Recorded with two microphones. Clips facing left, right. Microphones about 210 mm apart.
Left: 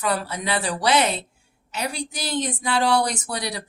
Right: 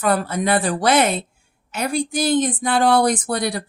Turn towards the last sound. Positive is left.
turn(degrees=-50)  # may be behind; listen again after turning